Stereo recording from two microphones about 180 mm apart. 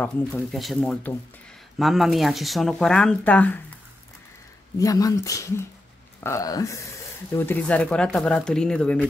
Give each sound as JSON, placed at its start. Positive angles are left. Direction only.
{"t": 0.0, "sound": "speech", "side_deg": 5}
{"t": 4.7, "sound": "speech", "side_deg": 20}